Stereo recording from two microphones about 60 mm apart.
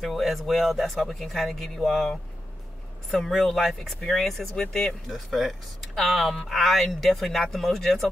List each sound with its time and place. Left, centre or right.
0.0 s speech: centre